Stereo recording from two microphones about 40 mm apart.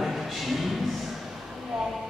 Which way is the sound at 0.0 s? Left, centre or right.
Centre.